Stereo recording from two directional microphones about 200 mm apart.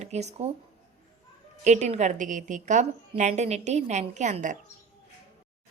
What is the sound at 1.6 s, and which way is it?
A woman's voice, 35° right (ahead or behind).